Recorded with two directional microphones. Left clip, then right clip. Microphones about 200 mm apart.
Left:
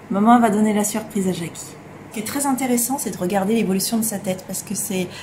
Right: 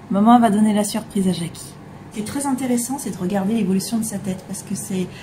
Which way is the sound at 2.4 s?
15° left (ahead or behind).